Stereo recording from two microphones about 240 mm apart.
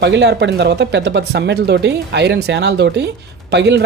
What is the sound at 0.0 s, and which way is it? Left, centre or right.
Speech, right.